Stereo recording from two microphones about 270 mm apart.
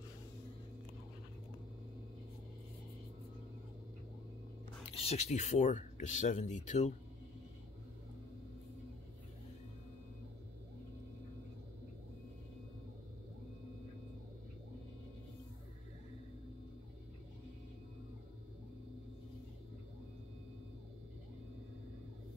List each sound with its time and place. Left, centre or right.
4.9 s speech: left